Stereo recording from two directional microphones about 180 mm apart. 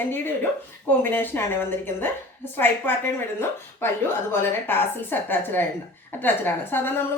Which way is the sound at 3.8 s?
15° left (ahead or behind).